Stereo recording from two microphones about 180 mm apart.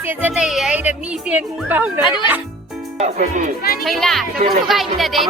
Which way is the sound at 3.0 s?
40° right (ahead or behind).